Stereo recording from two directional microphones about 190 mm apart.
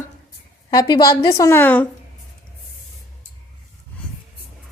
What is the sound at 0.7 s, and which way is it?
A woman's voice, 20° left (ahead or behind).